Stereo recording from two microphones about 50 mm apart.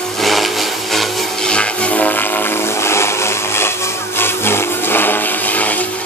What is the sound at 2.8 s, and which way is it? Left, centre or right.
Blender, left.